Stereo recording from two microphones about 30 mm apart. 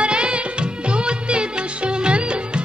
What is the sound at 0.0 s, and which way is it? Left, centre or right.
Music, right.